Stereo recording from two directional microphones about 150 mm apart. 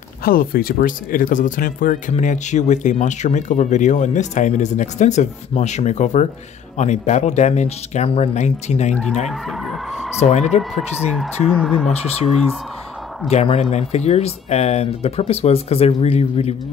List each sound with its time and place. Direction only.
0.2 s speech: 75° left (ahead or behind); by 8.9 s 50° left (ahead or behind)
9.3 s speech: centre (ahead or behind)
10.5 s speech: 45° left (ahead or behind)
11.0 s speech: centre (ahead or behind)
11.9 s speech: 45° left (ahead or behind)
13.3 s speech: 45° left (ahead or behind)